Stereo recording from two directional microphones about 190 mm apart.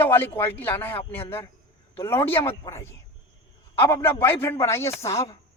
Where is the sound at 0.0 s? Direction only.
10° left (ahead or behind).